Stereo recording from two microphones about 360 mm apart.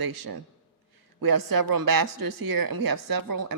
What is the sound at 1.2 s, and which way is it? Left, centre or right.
Speech, right.